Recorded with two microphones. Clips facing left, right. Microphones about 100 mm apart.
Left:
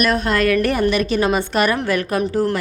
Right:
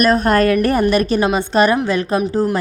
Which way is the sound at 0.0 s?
40° right (ahead or behind).